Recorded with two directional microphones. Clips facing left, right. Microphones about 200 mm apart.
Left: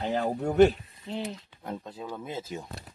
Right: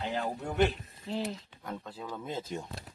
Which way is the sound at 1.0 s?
Centre (ahead or behind).